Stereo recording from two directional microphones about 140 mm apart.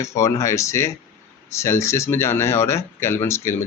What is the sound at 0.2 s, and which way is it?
Speech, 20° left (ahead or behind).